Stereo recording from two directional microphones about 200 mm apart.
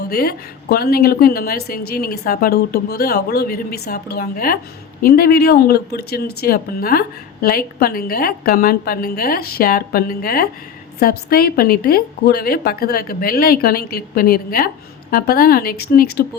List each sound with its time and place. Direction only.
0.0 s a woman's voice: 50° left (ahead or behind)